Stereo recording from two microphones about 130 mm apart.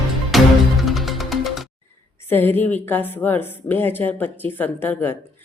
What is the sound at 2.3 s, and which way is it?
A woman's voice, 15° left (ahead or behind).